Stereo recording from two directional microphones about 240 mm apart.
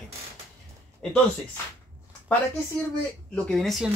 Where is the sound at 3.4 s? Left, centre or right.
Centre.